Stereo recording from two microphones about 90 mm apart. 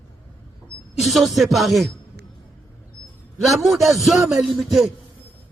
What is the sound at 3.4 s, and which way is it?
Music, centre (ahead or behind).